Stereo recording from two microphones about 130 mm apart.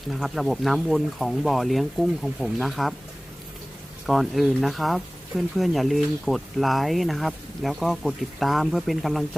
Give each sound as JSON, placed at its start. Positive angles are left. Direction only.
{"t": 0.1, "sound": "speech", "side_deg": 0}
{"t": 4.0, "sound": "speech", "side_deg": 0}